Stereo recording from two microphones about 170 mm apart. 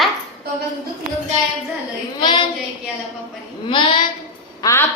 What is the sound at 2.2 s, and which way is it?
Speech, 25° left (ahead or behind).